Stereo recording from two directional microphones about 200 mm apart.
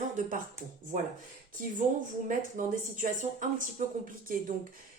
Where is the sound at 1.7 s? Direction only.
40° right (ahead or behind).